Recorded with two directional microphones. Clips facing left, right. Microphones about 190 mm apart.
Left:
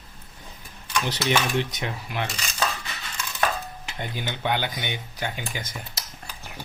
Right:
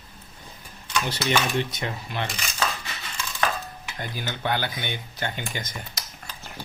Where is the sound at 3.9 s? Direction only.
20° left (ahead or behind).